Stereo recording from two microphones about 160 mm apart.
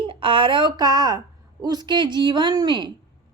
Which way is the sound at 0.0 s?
30° right (ahead or behind).